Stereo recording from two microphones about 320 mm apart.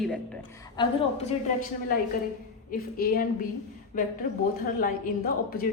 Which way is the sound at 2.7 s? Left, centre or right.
Left.